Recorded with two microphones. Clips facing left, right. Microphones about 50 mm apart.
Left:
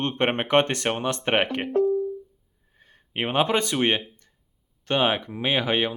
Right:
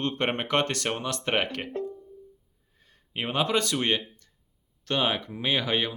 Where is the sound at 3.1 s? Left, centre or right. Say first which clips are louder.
Left 3 dB; left.